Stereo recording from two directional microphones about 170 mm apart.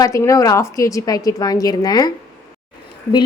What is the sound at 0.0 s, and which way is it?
A woman's voice, 20° left (ahead or behind).